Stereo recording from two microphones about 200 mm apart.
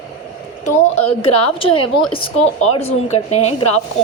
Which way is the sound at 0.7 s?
30° left (ahead or behind).